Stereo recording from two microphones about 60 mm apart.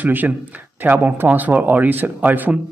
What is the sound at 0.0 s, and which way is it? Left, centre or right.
Speech, right.